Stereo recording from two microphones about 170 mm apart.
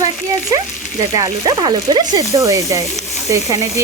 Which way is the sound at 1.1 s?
25° right (ahead or behind).